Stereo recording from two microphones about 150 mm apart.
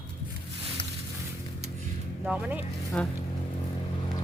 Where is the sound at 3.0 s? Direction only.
10° left (ahead or behind).